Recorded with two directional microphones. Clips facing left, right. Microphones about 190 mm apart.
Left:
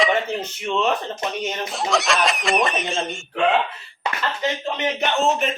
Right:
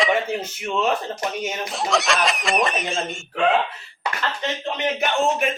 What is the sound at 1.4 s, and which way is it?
Speech, centre (ahead or behind).